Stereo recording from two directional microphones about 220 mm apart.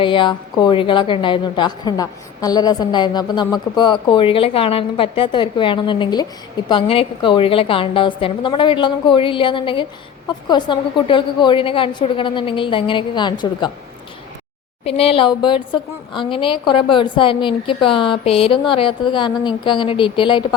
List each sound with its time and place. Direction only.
0.0 s a woman's voice: 20° left (ahead or behind)
14.8 s a woman's voice: 25° left (ahead or behind)